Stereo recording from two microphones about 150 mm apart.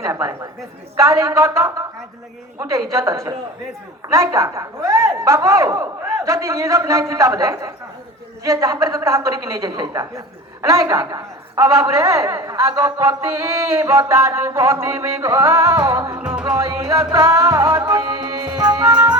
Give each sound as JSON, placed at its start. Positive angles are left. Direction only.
{"t": 0.0, "sound": "a woman's voice", "side_deg": -20}
{"t": 16.1, "sound": "music", "side_deg": -10}
{"t": 16.5, "sound": "a woman's voice", "side_deg": -20}